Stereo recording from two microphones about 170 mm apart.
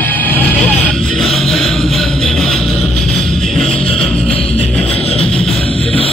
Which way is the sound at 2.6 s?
35° left (ahead or behind).